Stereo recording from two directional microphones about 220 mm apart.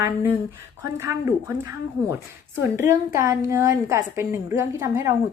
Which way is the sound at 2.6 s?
10° right (ahead or behind).